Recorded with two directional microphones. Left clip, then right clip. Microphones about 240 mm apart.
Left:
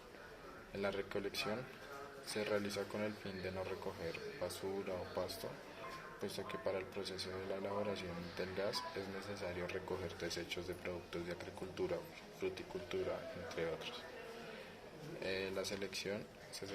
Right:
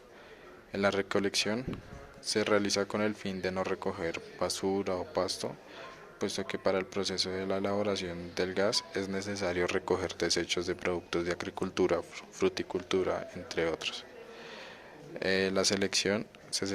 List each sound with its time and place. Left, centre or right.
0.7 s speech: right
15.2 s speech: right